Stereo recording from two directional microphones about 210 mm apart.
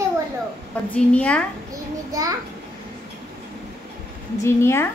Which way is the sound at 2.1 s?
15° right (ahead or behind).